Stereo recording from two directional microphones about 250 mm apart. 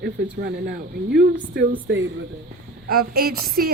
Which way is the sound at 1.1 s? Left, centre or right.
Right.